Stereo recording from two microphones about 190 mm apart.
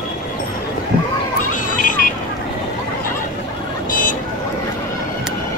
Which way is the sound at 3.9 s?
45° left (ahead or behind).